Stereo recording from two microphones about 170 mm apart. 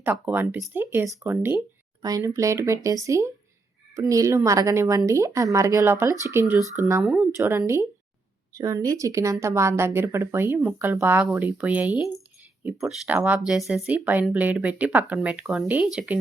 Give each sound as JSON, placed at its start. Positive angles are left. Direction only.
{"t": 0.0, "sound": "speech", "side_deg": -10}
{"t": 7.0, "sound": "speech", "side_deg": -5}
{"t": 7.3, "sound": "speech", "side_deg": -15}